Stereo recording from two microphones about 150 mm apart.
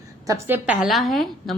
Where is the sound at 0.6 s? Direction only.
Centre (ahead or behind).